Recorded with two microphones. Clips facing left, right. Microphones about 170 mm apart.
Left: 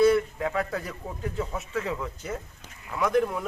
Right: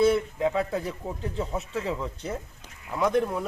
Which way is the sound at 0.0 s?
20° right (ahead or behind).